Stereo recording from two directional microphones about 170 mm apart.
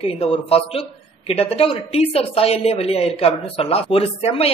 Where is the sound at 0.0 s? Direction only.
35° left (ahead or behind).